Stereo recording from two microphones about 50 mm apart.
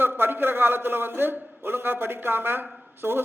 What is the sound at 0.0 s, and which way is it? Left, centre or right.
A man's voice, right.